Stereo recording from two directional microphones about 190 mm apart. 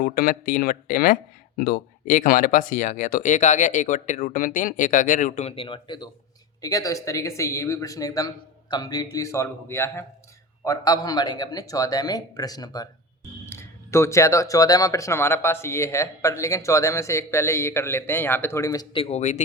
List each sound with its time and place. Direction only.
0.0 s a man's voice: 50° left (ahead or behind); by 18.9 s 15° left (ahead or behind)
18.9 s speech: 35° left (ahead or behind)